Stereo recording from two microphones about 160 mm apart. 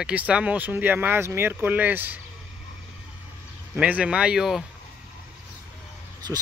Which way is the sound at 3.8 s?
10° right (ahead or behind).